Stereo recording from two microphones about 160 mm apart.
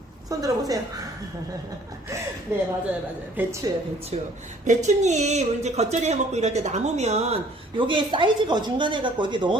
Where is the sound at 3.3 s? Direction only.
15° right (ahead or behind).